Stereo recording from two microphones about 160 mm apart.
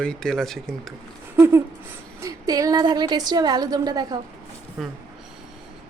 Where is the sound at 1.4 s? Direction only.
15° right (ahead or behind).